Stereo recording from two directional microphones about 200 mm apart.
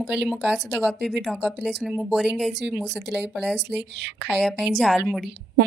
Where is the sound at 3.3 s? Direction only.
Centre (ahead or behind).